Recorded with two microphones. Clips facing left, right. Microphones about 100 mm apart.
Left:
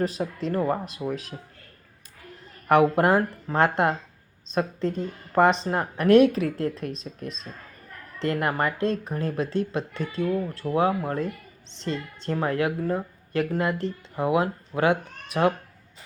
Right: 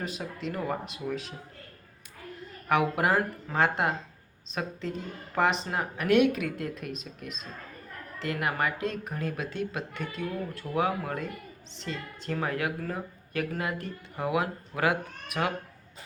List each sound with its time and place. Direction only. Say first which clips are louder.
0.0 s speech: left 8 dB; 40° left (ahead or behind)
2.6 s a woman's voice: left 6 dB; 40° left (ahead or behind)